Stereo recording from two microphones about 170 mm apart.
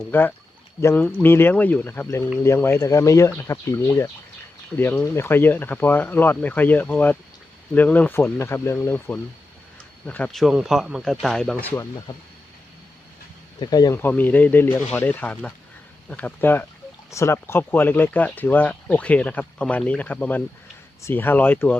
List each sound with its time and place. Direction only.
0.1 s speech: 10° left (ahead or behind)
13.6 s speech: 25° left (ahead or behind)
14.0 s speech: 10° left (ahead or behind)